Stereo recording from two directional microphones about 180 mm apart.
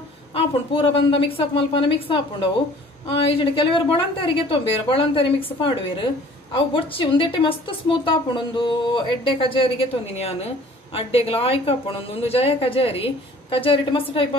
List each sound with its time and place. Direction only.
0.3 s a woman's voice: 30° left (ahead or behind)